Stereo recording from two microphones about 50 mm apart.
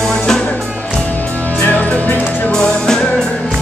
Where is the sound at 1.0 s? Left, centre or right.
Left.